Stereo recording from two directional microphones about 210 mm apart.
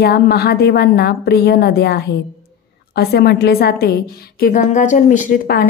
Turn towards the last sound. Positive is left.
turn(degrees=45)  # may be behind; listen again after turning